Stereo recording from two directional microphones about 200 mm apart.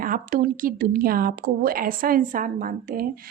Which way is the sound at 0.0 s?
45° right (ahead or behind).